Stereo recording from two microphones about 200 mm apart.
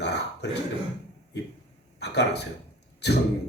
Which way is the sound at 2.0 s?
55° left (ahead or behind).